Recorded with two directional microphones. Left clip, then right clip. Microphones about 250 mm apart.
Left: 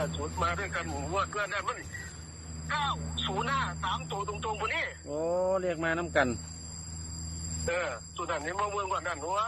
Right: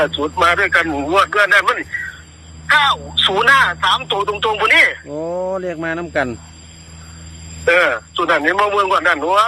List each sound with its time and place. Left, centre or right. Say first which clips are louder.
0.0 s speech: right 17 dB; right
5.1 s speech: right 8 dB; right
7.6 s speech: right 19 dB; right